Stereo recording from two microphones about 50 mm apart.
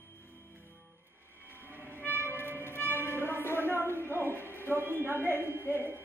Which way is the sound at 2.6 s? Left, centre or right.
Left.